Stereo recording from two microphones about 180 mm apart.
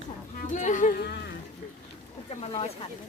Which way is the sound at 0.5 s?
45° left (ahead or behind).